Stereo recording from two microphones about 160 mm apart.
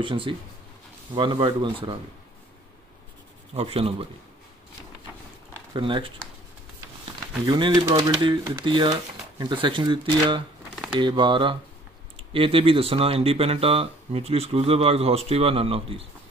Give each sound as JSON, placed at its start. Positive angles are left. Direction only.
{"t": 0.0, "sound": "speech", "side_deg": -30}
{"t": 3.5, "sound": "speech", "side_deg": -40}
{"t": 5.7, "sound": "speech", "side_deg": -30}
{"t": 7.4, "sound": "speech", "side_deg": -30}